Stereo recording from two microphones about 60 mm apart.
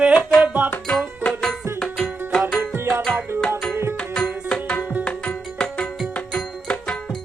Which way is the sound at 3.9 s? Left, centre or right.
Centre.